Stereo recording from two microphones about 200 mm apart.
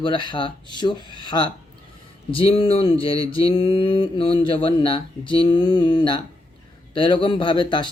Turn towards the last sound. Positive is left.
turn(degrees=25)  # may be behind; listen again after turning